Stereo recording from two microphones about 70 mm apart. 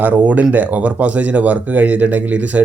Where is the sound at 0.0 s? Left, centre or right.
Centre.